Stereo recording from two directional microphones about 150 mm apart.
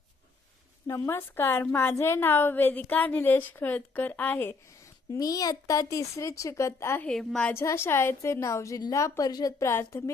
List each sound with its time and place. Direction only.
0.9 s a woman's voice: 20° left (ahead or behind)
7.1 s a woman's voice: 5° left (ahead or behind)
7.5 s a woman's voice: 20° left (ahead or behind)